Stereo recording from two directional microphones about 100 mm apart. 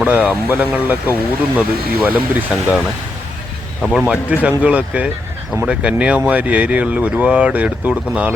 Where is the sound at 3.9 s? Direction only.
10° right (ahead or behind).